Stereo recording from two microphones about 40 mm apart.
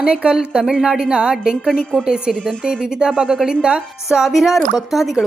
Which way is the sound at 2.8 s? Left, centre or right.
Centre.